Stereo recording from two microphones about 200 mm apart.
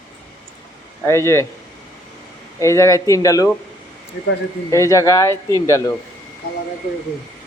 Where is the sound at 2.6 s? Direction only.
15° left (ahead or behind).